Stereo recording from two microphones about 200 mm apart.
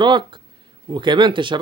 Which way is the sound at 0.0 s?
25° right (ahead or behind).